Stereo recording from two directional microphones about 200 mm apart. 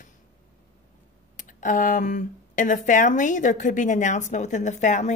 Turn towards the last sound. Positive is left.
turn(degrees=35)  # may be behind; listen again after turning